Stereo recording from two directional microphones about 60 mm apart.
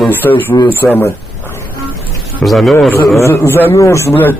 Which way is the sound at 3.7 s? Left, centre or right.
Left.